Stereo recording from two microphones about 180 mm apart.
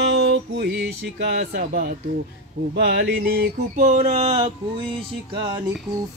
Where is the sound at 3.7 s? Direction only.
45° right (ahead or behind).